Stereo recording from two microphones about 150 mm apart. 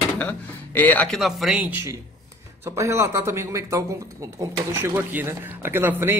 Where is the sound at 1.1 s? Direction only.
Centre (ahead or behind).